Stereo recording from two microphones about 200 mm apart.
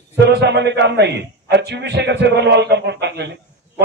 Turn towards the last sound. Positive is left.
turn(degrees=-55)  # may be behind; listen again after turning